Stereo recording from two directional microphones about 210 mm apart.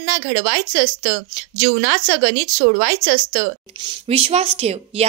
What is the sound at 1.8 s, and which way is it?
Speech, 90° right.